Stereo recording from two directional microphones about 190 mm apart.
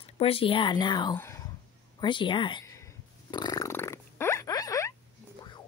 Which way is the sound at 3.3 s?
20° left (ahead or behind).